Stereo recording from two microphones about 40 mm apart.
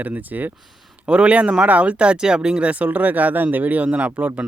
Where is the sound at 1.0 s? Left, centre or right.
Right.